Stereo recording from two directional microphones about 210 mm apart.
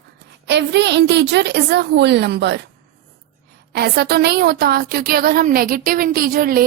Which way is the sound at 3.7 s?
50° right (ahead or behind).